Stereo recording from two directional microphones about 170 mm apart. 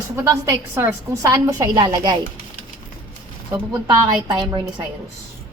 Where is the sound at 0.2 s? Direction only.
15° right (ahead or behind).